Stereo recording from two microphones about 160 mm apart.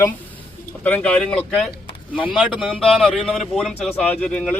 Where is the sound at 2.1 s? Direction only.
5° right (ahead or behind).